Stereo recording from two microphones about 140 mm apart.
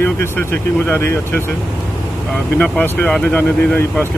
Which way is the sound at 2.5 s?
10° left (ahead or behind).